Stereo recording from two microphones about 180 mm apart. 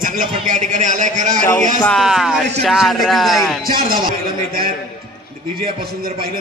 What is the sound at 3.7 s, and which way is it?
Speech, 55° right (ahead or behind).